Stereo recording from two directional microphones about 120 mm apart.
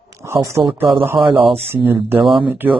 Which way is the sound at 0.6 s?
40° right (ahead or behind).